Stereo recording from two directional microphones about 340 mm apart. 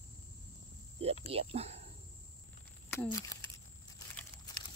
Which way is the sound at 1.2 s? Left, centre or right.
Centre.